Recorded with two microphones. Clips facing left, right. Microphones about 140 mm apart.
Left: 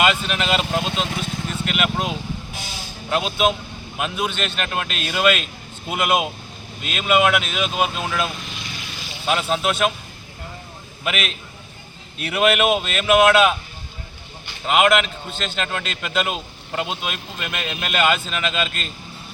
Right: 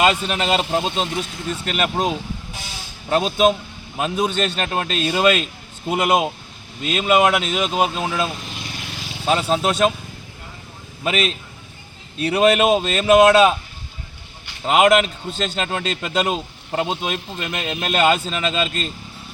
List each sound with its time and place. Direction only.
0.0 s speech: 35° right (ahead or behind)
11.0 s speech: 35° right (ahead or behind)
14.7 s speech: 35° right (ahead or behind)